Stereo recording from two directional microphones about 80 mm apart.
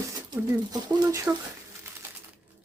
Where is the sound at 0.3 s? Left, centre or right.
Right.